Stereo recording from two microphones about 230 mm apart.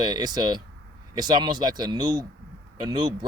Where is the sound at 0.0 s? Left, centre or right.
Centre.